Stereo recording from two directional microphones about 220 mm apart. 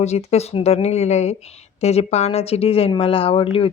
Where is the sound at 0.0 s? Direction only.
30° left (ahead or behind).